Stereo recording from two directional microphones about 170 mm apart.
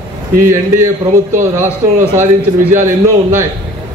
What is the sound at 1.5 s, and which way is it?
A man's voice, 15° right (ahead or behind).